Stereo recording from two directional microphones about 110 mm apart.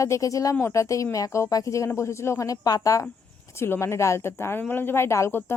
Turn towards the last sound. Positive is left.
turn(degrees=25)  # may be behind; listen again after turning